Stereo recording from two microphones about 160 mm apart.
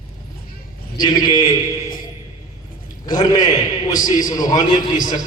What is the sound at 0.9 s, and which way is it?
Speech, 25° left (ahead or behind).